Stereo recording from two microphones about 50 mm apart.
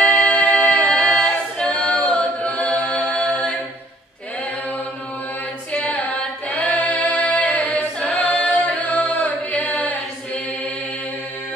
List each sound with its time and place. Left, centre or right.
0.0 s a capella: left
1.1 s a capella: centre
1.7 s a capella: left
5.9 s singing: left
8.4 s music: left